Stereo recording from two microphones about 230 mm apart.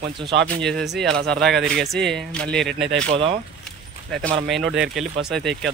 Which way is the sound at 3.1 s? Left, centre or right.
Right.